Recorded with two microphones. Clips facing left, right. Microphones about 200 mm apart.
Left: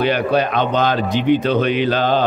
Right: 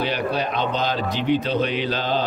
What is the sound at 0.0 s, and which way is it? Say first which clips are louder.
A man's voice: left 7 dB; 60° left (ahead or behind).